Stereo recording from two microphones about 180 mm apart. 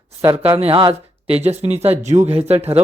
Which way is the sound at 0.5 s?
30° right (ahead or behind).